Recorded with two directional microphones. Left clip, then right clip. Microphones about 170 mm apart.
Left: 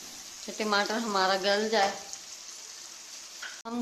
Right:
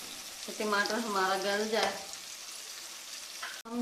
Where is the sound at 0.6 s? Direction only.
90° left.